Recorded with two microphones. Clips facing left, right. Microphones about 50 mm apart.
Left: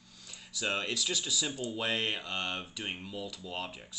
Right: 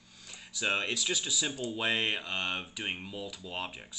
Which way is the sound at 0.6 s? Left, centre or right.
Centre.